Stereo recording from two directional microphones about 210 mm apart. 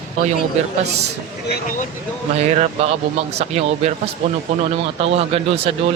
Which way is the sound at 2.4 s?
30° right (ahead or behind).